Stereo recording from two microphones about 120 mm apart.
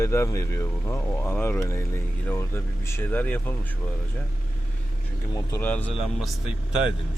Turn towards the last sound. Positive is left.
turn(degrees=-5)  # may be behind; listen again after turning